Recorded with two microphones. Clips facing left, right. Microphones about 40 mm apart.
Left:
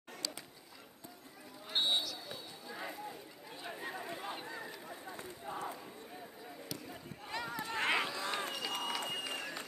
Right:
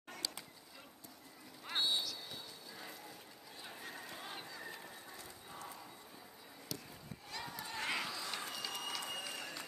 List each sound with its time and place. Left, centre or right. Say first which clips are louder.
1.7 s basketball bounce: left 3 dB; left
2.2 s clip-clop: left 4 dB; left
3.6 s chatter: left 7 dB; left
4.5 s a sound: left 4 dB; left
6.9 s a sound: left 6 dB; left
8.7 s applause: left 5 dB; left
9.3 s run: left 4 dB; left